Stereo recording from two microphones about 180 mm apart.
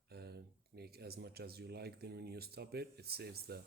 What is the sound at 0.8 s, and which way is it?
Speech, 60° right (ahead or behind).